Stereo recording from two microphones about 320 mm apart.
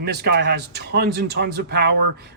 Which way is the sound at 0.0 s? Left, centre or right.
Right.